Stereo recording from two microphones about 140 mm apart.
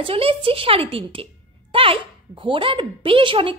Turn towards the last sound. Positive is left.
turn(degrees=-40)  # may be behind; listen again after turning